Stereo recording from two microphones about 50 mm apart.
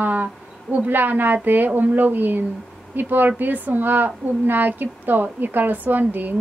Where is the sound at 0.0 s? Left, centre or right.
Right.